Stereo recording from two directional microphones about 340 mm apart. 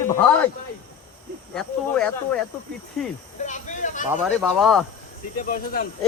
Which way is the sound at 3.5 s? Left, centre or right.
Left.